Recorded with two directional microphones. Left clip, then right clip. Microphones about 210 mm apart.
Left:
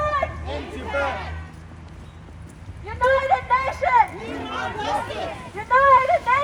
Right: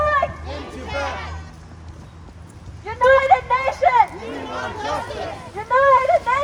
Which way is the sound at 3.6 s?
35° right (ahead or behind).